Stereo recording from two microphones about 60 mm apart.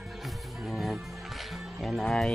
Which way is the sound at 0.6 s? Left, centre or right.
Centre.